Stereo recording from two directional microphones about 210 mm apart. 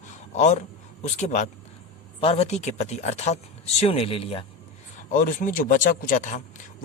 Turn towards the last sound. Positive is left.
turn(degrees=35)  # may be behind; listen again after turning